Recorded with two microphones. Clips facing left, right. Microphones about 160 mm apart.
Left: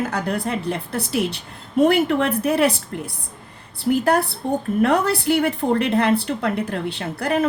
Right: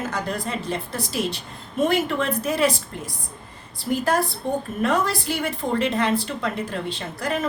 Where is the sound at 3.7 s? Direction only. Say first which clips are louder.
Left 4 dB; 65° left (ahead or behind).